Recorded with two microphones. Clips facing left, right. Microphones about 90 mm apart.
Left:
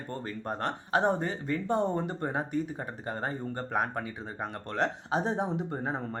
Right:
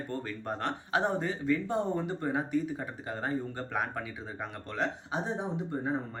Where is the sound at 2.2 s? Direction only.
35° left (ahead or behind).